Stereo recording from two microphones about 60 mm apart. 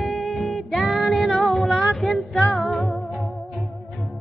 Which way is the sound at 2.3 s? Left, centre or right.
Centre.